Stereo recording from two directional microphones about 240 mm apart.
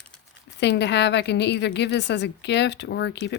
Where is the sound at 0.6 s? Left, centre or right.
Left.